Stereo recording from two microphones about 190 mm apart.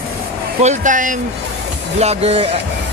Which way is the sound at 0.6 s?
40° right (ahead or behind).